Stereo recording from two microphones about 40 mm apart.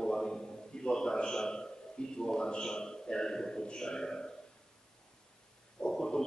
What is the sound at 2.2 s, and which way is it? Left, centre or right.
A man's voice, centre.